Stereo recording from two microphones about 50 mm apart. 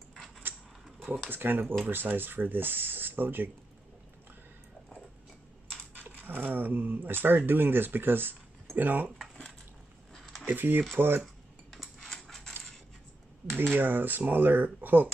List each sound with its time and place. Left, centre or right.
1.3 s speech: right
5.9 s speech: right
10.1 s a sound: centre
10.4 s speech: right
11.7 s a sound: centre
13.7 s speech: right